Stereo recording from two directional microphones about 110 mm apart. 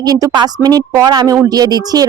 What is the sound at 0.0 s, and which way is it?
Speech, 35° right (ahead or behind).